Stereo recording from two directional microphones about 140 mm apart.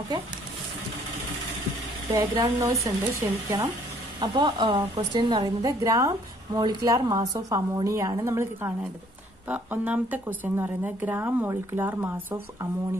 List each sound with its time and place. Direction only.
2.1 s a woman's voice: 25° right (ahead or behind)
4.2 s a woman's voice: 35° right (ahead or behind); by 12.4 s 15° right (ahead or behind)